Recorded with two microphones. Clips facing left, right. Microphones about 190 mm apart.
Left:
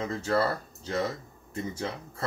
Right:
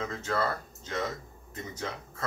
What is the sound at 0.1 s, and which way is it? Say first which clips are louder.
Speech: left 4 dB; 35° left (ahead or behind).